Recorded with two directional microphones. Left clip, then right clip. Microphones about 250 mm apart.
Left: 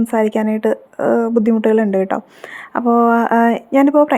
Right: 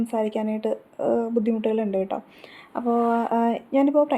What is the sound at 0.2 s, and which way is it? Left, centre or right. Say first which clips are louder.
Speech: left 9 dB; left.